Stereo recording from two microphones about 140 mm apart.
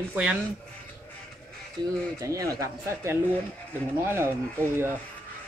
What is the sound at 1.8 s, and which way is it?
Speech, 30° right (ahead or behind).